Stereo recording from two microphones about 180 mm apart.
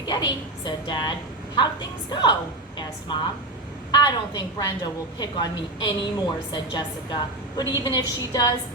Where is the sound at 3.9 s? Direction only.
25° left (ahead or behind).